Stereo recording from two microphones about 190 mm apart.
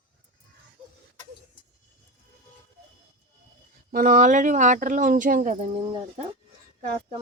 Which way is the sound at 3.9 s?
45° right (ahead or behind).